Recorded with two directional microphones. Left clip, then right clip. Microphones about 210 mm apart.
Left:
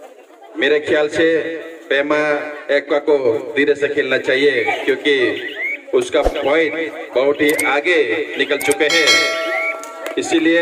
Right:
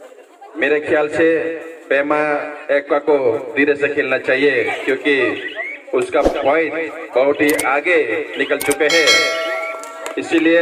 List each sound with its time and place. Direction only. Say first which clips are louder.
0.6 s a man's voice: left 1 dB; 45° left (ahead or behind)
8.9 s a sound: right 1 dB; centre (ahead or behind)
10.2 s a man's voice: right 1 dB; 45° left (ahead or behind)